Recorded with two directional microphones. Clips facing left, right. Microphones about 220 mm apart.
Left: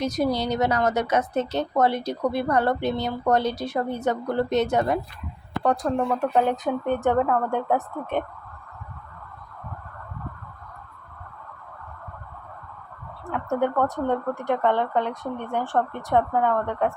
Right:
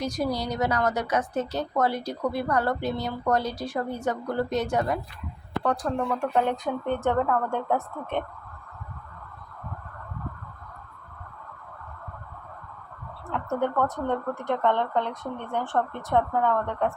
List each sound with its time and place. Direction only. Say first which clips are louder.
0.0 s a woman's voice: left 4 dB; 20° left (ahead or behind)
13.5 s speech: left 3 dB; 15° left (ahead or behind)